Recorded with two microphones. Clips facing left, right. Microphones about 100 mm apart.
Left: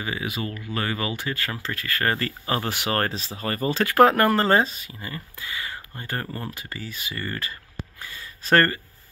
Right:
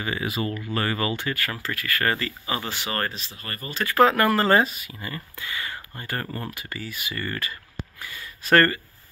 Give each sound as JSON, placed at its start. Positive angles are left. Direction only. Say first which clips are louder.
{"t": 0.0, "sound": "speech", "louder": "right 2 dB", "side_deg": 5}
{"t": 2.1, "sound": "speech", "louder": "left 3 dB", "side_deg": 45}
{"t": 2.8, "sound": "speech", "louder": "left 4 dB", "side_deg": 65}
{"t": 3.9, "sound": "speech", "louder": "left 1 dB", "side_deg": 45}
{"t": 4.4, "sound": "speech", "louder": "even", "side_deg": 25}